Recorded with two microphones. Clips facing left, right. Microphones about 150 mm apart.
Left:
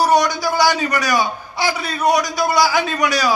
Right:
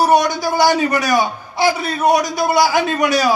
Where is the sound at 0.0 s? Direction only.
55° right (ahead or behind).